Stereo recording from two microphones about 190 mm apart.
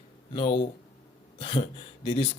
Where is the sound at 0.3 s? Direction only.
30° left (ahead or behind).